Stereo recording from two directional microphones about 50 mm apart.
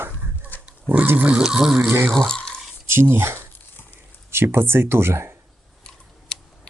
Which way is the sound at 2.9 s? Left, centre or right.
Right.